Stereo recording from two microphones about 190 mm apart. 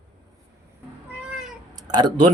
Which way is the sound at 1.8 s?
20° right (ahead or behind).